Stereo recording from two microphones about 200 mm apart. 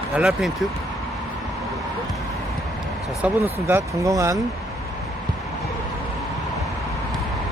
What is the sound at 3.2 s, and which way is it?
Speech, 10° right (ahead or behind).